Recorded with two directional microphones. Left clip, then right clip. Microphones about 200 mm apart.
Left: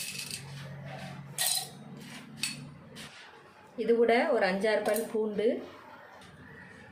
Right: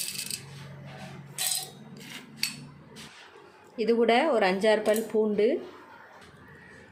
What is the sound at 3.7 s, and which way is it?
A woman's voice, 30° right (ahead or behind).